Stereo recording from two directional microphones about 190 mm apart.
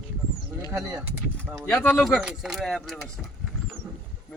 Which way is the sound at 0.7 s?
15° right (ahead or behind).